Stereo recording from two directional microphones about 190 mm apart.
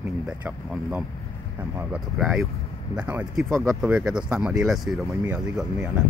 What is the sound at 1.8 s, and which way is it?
Speech, 5° right (ahead or behind).